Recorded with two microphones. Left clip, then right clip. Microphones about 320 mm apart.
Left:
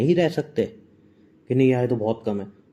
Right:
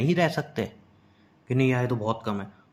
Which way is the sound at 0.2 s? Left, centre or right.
Right.